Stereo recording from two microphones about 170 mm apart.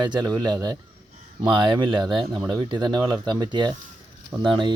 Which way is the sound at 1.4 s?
30° right (ahead or behind).